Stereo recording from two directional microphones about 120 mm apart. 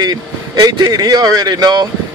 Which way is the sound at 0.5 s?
35° right (ahead or behind).